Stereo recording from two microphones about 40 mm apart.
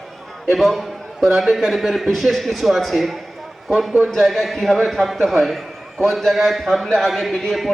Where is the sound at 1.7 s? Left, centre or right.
Centre.